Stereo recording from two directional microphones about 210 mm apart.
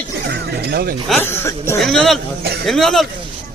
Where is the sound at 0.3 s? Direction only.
50° right (ahead or behind).